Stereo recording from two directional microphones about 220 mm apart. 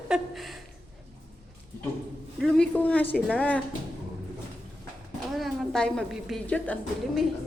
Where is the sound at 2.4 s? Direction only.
5° left (ahead or behind).